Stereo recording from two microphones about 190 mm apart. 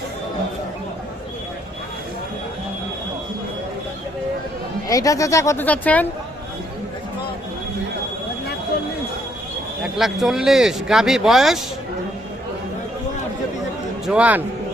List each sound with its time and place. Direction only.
4.9 s speech: 15° left (ahead or behind)
9.8 s speech: centre (ahead or behind)
14.1 s a man's voice: 5° right (ahead or behind)